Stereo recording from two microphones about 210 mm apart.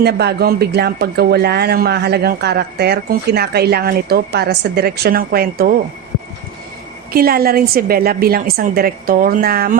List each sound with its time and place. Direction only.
0.0 s speech: 50° right (ahead or behind)
7.1 s speech: 45° right (ahead or behind)